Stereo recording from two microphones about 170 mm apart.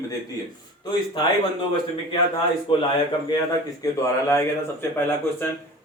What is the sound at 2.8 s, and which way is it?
Speech, 30° left (ahead or behind).